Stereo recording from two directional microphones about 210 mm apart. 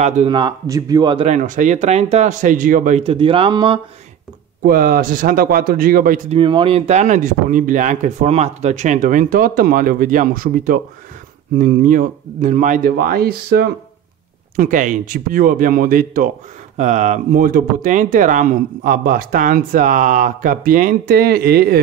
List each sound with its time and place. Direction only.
0.0 s speech: 25° right (ahead or behind)
4.6 s speech: 45° right (ahead or behind)
6.3 s speech: 25° right (ahead or behind); by 21.8 s 45° right (ahead or behind)